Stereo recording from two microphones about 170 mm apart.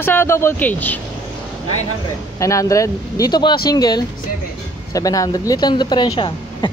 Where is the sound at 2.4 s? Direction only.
20° left (ahead or behind).